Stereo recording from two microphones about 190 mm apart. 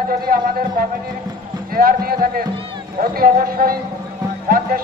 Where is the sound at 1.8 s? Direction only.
50° right (ahead or behind).